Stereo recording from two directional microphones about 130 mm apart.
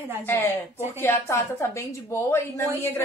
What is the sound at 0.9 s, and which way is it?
A woman's voice, 20° left (ahead or behind).